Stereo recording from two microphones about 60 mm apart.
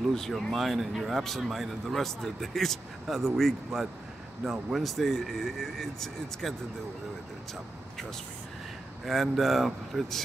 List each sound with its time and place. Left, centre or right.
0.1 s speech: centre
9.0 s speech: centre